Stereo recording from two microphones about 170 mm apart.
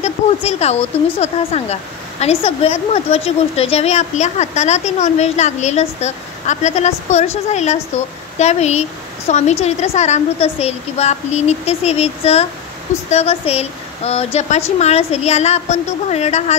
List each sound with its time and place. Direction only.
0.0 s speech: 40° left (ahead or behind)